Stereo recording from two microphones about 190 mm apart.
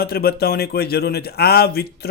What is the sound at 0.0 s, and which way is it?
A man's voice, 55° left (ahead or behind).